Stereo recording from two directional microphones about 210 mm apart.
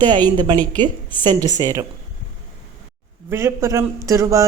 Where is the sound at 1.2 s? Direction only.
20° right (ahead or behind).